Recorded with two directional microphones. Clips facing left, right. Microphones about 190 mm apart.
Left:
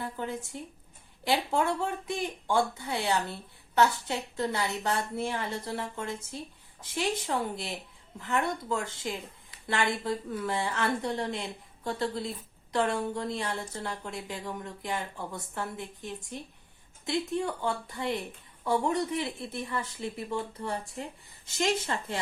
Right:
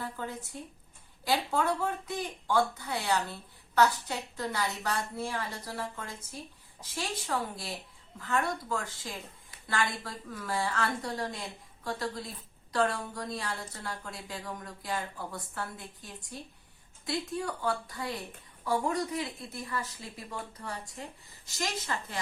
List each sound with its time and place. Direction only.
1.2 s speech: 25° left (ahead or behind)